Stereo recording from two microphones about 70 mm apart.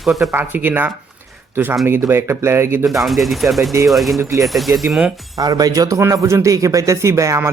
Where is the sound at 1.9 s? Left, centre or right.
Right.